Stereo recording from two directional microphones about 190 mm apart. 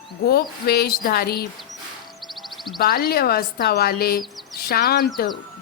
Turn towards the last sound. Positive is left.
turn(degrees=50)  # may be behind; listen again after turning